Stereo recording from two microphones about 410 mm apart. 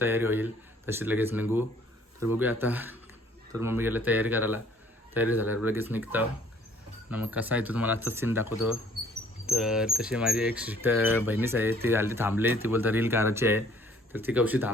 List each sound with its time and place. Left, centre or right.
0.0 s speech: centre